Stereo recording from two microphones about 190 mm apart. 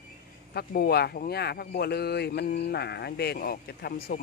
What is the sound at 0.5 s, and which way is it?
Speech, 55° left (ahead or behind).